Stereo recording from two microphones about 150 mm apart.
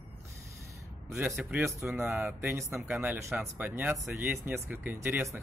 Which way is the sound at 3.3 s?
15° right (ahead or behind).